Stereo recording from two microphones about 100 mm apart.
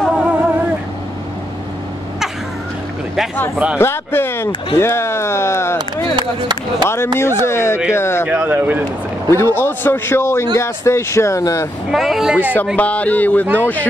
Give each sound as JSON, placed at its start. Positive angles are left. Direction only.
{"t": 0.1, "sound": "vehicle", "side_deg": -15}
{"t": 3.7, "sound": "a man's voice", "side_deg": 25}
{"t": 6.1, "sound": "speech", "side_deg": -50}
{"t": 7.4, "sound": "a man's voice", "side_deg": 25}
{"t": 8.3, "sound": "speech", "side_deg": -20}
{"t": 9.3, "sound": "a man's voice", "side_deg": 25}
{"t": 11.9, "sound": "speech", "side_deg": 0}
{"t": 12.7, "sound": "speech", "side_deg": 15}